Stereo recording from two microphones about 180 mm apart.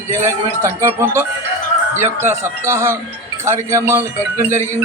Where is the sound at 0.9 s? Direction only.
15° right (ahead or behind).